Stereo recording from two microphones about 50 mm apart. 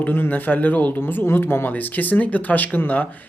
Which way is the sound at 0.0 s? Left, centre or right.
Left.